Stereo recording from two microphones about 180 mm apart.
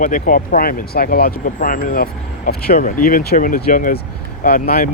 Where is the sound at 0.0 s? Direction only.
45° left (ahead or behind).